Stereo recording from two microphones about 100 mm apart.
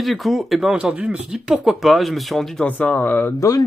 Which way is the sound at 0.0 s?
Centre (ahead or behind).